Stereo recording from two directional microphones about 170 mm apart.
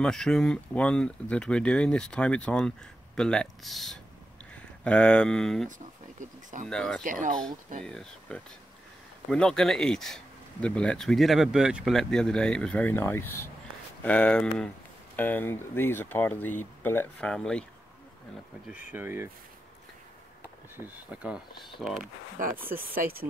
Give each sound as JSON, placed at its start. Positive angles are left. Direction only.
{"t": 0.0, "sound": "speech", "side_deg": 5}
{"t": 6.7, "sound": "speech", "side_deg": 5}
{"t": 7.0, "sound": "speech", "side_deg": -50}
{"t": 7.8, "sound": "speech", "side_deg": 5}
{"t": 18.7, "sound": "speech", "side_deg": -10}
{"t": 20.7, "sound": "speech", "side_deg": -10}
{"t": 22.4, "sound": "speech", "side_deg": -50}